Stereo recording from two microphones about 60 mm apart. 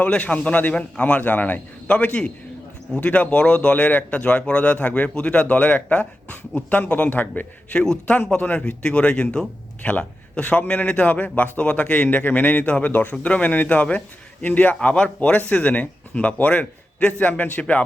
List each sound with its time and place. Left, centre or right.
0.2 s speech: left